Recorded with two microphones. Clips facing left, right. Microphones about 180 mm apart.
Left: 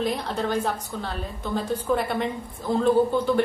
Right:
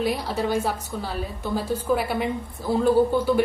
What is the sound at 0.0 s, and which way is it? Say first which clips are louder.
A woman's voice: right 1 dB; 5° right (ahead or behind).